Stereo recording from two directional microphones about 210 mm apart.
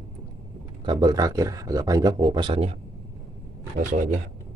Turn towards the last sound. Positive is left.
turn(degrees=-40)  # may be behind; listen again after turning